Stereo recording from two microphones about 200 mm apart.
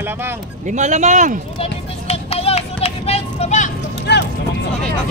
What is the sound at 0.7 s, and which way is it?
Speech, 35° right (ahead or behind).